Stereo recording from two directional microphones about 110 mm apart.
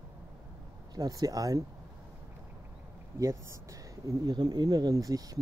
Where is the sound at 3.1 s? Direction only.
25° right (ahead or behind).